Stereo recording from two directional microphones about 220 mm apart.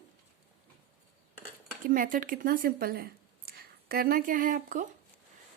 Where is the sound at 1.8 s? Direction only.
40° right (ahead or behind).